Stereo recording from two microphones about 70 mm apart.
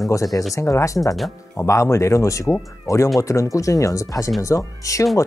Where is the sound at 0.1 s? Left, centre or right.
Left.